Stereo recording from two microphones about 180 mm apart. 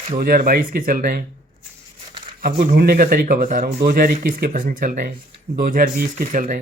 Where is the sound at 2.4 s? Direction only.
55° right (ahead or behind).